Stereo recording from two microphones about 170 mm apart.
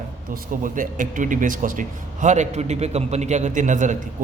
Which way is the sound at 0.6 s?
50° right (ahead or behind).